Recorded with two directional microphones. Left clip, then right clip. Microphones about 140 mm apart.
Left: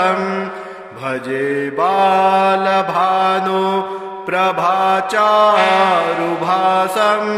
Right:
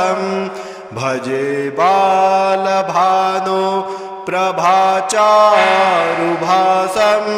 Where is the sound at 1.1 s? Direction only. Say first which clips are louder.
Right 1 dB; 60° right (ahead or behind).